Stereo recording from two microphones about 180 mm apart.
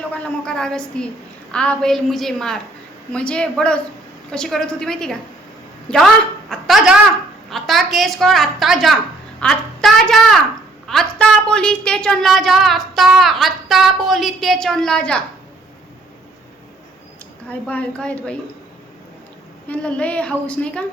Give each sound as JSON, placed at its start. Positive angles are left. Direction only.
{"t": 0.1, "sound": "a woman's voice", "side_deg": 5}
{"t": 6.5, "sound": "a sound", "side_deg": 0}
{"t": 7.5, "sound": "a woman's voice", "side_deg": 0}
{"t": 17.5, "sound": "a woman's voice", "side_deg": 10}
{"t": 19.6, "sound": "a woman's voice", "side_deg": 5}